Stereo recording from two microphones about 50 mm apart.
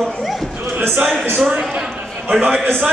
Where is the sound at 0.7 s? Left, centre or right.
Right.